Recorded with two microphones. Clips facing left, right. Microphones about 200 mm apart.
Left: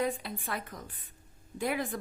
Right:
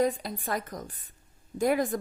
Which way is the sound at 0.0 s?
40° right (ahead or behind).